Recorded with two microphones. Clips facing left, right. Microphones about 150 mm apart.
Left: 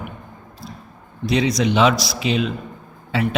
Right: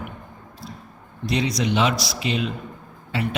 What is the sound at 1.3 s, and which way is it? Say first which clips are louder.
Speech: left 4 dB; 90° left.